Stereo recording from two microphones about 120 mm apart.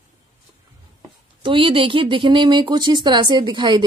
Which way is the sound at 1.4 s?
45° right (ahead or behind).